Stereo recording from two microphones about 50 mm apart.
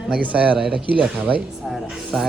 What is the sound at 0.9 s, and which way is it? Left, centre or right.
Speech, right.